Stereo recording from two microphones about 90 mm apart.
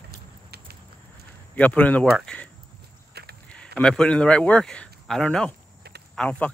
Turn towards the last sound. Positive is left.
turn(degrees=10)  # may be behind; listen again after turning